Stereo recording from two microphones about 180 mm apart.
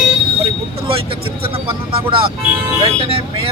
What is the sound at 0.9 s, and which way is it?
Vehicle, 30° right (ahead or behind).